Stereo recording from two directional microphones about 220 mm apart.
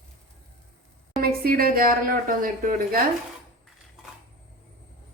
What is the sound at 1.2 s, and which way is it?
Speech, 45° right (ahead or behind).